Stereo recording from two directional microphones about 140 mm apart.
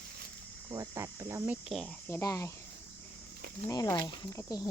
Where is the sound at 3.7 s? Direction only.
25° left (ahead or behind).